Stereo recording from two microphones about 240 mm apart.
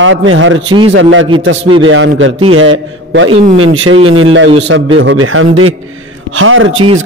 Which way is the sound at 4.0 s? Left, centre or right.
Right.